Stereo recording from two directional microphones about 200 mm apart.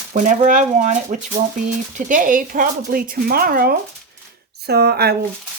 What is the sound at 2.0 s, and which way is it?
Speech, 40° right (ahead or behind).